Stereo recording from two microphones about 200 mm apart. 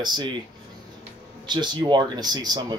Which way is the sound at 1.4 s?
20° right (ahead or behind).